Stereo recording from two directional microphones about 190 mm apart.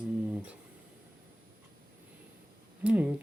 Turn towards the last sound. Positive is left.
turn(degrees=-5)  # may be behind; listen again after turning